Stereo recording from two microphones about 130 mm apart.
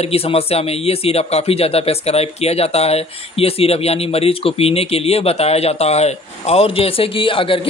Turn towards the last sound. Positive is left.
turn(degrees=45)  # may be behind; listen again after turning